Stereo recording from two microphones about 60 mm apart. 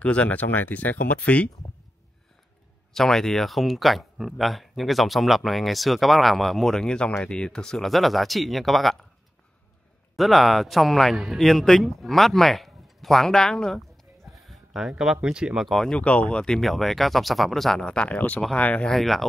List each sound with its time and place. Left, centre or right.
0.0 s speech: left
2.9 s speech: centre
10.1 s speech: centre
14.3 s a sound: centre
15.2 s speech: centre
15.6 s speech: centre
16.6 s speech: centre; by 18.9 s left
18.9 s speech: centre